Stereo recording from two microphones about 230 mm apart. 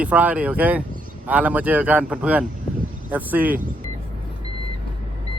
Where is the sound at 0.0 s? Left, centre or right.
Centre.